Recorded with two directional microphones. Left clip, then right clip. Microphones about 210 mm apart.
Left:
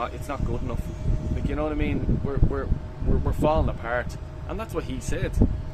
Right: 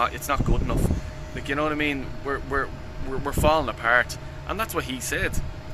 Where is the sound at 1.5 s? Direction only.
5° right (ahead or behind).